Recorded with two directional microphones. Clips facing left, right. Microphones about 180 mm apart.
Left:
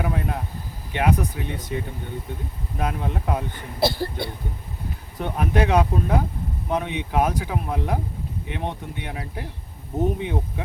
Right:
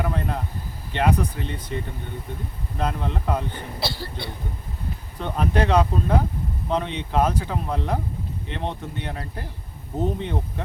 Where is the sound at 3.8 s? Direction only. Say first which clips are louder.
Left 10 dB; 50° left (ahead or behind).